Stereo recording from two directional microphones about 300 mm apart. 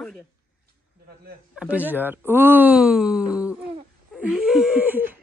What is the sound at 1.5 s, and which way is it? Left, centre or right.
Speech, centre.